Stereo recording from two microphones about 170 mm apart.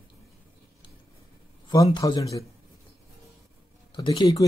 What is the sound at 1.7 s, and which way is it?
Speech, 20° left (ahead or behind).